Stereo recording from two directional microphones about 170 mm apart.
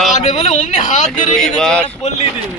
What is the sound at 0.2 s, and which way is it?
Speech, 40° left (ahead or behind).